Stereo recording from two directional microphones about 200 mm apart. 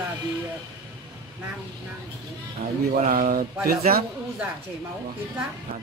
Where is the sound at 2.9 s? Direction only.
45° right (ahead or behind).